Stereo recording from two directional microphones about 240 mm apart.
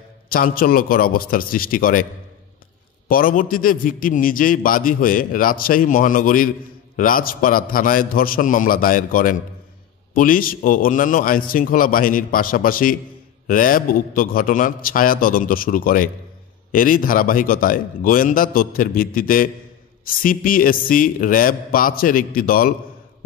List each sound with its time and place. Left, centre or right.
0.3 s a man's voice: left
3.1 s a man's voice: left